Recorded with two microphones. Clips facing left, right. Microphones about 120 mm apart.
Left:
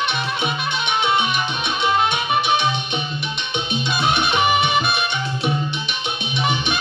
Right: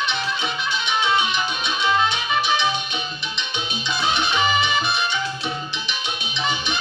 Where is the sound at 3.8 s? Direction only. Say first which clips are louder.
Left 2 dB; 60° left (ahead or behind).